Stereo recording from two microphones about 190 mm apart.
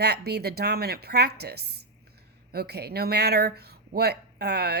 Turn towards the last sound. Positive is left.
turn(degrees=-55)  # may be behind; listen again after turning